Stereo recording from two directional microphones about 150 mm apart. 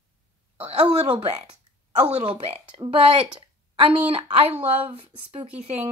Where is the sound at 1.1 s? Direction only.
40° right (ahead or behind).